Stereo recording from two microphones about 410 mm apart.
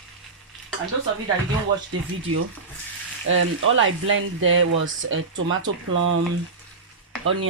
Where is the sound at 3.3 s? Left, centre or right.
Right.